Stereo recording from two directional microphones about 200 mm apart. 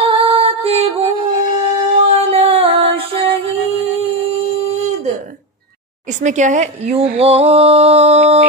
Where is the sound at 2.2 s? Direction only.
30° right (ahead or behind).